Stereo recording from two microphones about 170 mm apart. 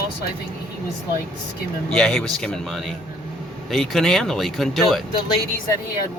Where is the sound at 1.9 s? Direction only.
5° left (ahead or behind).